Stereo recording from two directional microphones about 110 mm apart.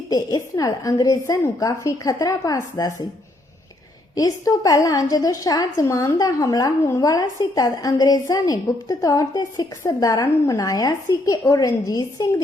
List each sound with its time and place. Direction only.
0.1 s a woman's voice: 35° left (ahead or behind)
4.1 s a woman's voice: 35° left (ahead or behind)